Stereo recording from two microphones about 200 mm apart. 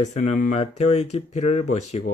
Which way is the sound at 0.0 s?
35° left (ahead or behind).